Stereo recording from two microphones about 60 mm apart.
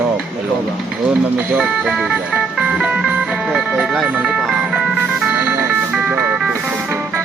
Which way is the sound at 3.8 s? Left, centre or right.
Centre.